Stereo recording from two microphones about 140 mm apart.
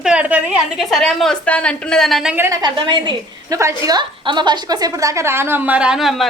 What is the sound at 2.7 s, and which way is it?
Speech, 35° right (ahead or behind).